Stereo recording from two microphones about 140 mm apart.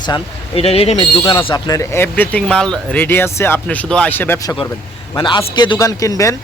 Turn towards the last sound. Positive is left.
turn(degrees=20)  # may be behind; listen again after turning